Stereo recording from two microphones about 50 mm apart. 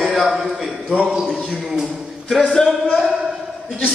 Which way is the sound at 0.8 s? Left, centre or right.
Centre.